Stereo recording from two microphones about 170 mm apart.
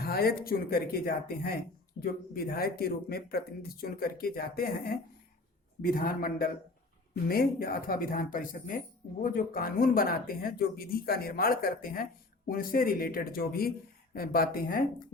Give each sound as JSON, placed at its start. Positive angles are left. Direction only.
{"t": 0.0, "sound": "speech", "side_deg": 65}
{"t": 5.8, "sound": "speech", "side_deg": 60}